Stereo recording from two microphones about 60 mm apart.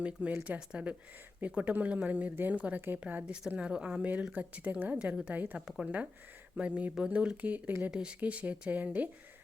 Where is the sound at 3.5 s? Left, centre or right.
Centre.